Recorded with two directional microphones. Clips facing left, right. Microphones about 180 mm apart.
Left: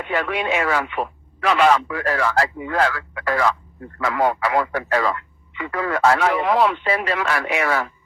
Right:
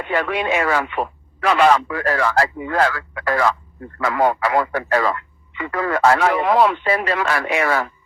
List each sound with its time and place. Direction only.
0.1 s speech: 40° right (ahead or behind)